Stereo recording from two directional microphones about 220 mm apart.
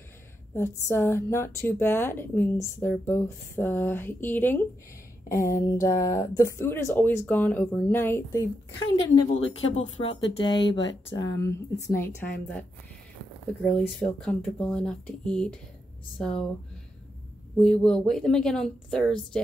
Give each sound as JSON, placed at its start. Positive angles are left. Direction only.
{"t": 0.6, "sound": "speech", "side_deg": 10}
{"t": 17.6, "sound": "speech", "side_deg": 5}